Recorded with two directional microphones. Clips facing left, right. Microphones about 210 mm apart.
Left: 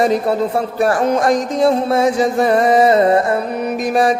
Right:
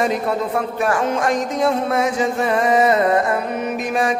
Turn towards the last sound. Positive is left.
turn(degrees=35)  # may be behind; listen again after turning